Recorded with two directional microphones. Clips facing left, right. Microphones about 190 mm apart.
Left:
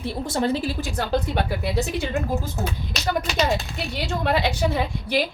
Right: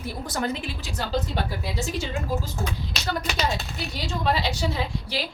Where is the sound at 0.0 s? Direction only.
30° left (ahead or behind).